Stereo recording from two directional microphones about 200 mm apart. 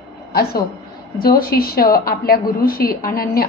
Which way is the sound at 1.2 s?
50° left (ahead or behind).